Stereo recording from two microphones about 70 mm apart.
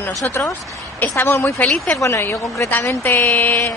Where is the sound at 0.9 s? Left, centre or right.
Left.